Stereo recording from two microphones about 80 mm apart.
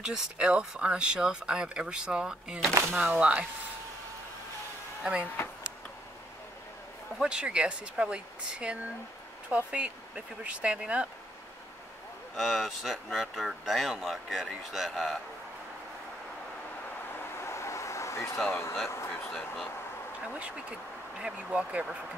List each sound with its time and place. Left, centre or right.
0.0 s speech: centre
7.2 s speech: centre
12.4 s speech: centre
17.4 s vehicle: left
18.5 s speech: left
19.3 s speech: centre
20.3 s speech: centre